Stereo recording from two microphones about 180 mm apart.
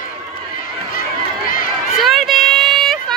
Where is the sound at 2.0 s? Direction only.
Centre (ahead or behind).